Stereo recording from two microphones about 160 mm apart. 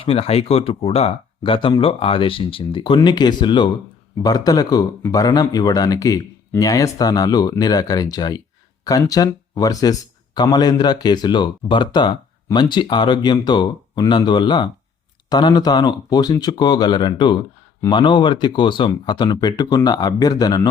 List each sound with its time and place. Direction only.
0.0 s speech: 40° left (ahead or behind)